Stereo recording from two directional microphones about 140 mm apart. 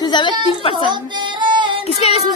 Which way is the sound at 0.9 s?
35° right (ahead or behind).